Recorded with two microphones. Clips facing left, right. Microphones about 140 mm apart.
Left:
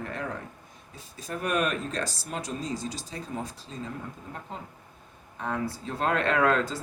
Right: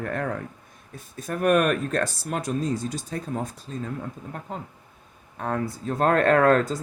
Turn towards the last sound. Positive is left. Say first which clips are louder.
# right 6 dB
turn(degrees=-45)  # may be behind; listen again after turning